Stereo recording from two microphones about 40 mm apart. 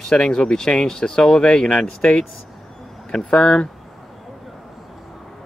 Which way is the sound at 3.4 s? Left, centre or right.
Left.